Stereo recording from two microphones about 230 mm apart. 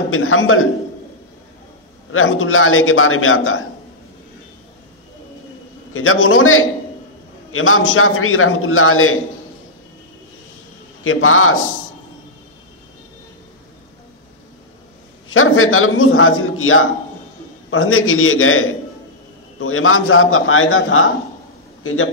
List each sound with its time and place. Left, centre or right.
0.1 s a man's voice: left
2.1 s a man's voice: left
5.9 s a man's voice: left
11.1 s a man's voice: left
15.2 s a man's voice: left